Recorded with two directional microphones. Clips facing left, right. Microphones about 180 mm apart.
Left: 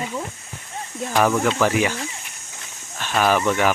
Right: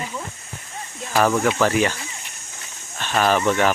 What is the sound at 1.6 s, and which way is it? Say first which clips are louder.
Speech: right 1 dB; 10° left (ahead or behind).